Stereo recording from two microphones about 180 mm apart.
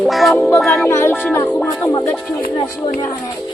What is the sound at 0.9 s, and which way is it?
A woman's voice, 15° left (ahead or behind).